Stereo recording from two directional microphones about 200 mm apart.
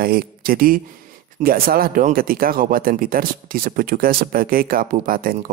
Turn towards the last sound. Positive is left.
turn(degrees=-45)  # may be behind; listen again after turning